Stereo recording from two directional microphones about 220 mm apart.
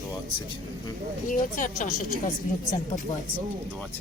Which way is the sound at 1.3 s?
35° left (ahead or behind).